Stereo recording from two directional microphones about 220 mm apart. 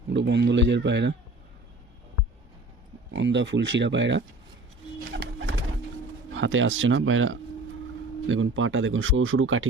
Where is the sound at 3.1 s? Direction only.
55° right (ahead or behind).